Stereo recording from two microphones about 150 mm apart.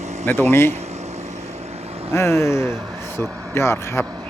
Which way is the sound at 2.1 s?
20° left (ahead or behind).